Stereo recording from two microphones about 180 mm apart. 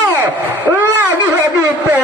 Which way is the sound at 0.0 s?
10° right (ahead or behind).